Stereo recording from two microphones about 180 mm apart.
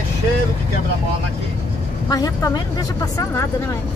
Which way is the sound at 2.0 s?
20° left (ahead or behind).